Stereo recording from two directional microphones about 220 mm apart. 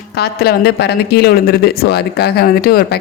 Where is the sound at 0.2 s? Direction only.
45° left (ahead or behind).